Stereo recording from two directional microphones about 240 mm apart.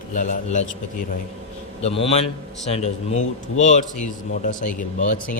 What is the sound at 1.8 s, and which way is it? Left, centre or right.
A man's voice, left.